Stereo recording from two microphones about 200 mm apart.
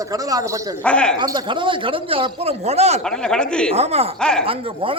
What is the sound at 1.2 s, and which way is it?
Speech, 20° right (ahead or behind).